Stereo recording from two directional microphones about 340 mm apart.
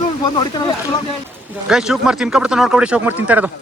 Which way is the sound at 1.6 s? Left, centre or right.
Centre.